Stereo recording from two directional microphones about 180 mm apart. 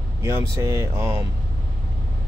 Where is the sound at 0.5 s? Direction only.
15° right (ahead or behind).